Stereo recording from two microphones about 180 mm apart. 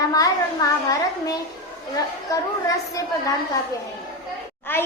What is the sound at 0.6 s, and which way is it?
Speech, 20° left (ahead or behind).